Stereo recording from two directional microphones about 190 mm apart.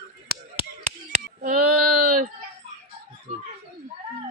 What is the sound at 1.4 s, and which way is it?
Child singing, 45° right (ahead or behind).